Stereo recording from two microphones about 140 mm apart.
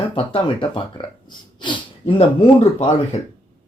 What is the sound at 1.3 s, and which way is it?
Snort, 35° left (ahead or behind).